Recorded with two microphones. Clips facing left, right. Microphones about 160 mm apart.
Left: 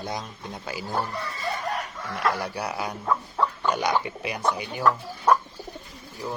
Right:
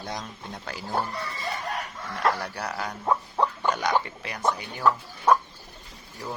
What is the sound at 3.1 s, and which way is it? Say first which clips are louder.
Rodents: right 1 dB; 20° right (ahead or behind).